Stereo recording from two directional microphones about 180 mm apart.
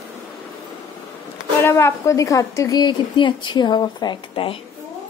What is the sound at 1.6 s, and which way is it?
A woman's voice, 15° left (ahead or behind).